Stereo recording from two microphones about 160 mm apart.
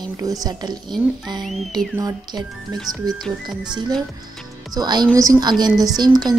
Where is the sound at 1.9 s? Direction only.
25° right (ahead or behind).